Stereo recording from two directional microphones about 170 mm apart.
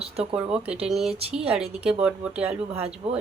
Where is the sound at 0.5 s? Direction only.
5° right (ahead or behind).